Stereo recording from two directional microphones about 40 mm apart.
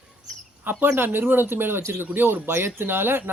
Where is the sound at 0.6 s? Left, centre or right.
Right.